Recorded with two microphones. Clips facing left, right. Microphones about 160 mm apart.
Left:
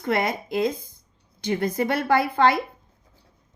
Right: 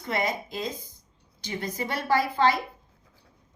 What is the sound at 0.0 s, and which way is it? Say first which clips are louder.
A woman's voice: left 4 dB; 55° left (ahead or behind).